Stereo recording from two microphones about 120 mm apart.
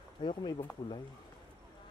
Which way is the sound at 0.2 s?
40° left (ahead or behind).